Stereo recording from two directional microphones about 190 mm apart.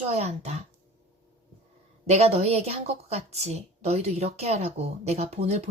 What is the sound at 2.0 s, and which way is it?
A woman's voice, 35° right (ahead or behind).